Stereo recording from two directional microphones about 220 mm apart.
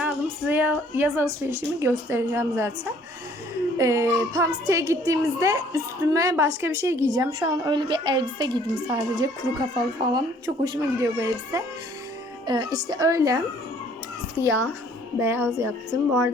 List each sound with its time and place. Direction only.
0.0 s a woman's voice: 5° right (ahead or behind)
3.8 s a woman's voice: 15° right (ahead or behind)
14.4 s a child's voice: 15° left (ahead or behind)
15.2 s a woman's voice: 10° right (ahead or behind)